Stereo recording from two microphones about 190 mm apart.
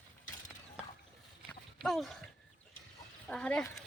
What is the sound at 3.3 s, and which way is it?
Speech, 5° left (ahead or behind).